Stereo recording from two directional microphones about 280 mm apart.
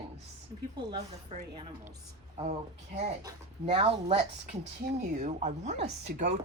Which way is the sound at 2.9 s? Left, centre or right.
Right.